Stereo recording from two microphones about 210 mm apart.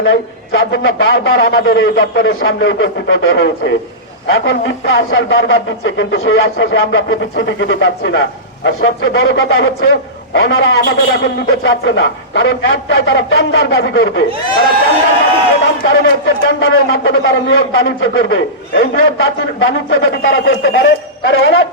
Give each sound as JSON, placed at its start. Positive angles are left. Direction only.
{"t": 0.0, "sound": "speech", "side_deg": 60}
{"t": 10.8, "sound": "speech", "side_deg": 50}
{"t": 15.9, "sound": "speech", "side_deg": 65}